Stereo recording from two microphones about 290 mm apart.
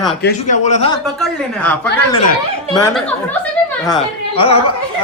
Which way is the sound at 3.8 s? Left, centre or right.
Centre.